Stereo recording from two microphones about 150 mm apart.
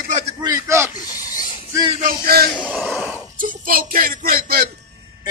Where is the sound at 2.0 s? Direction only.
90° right.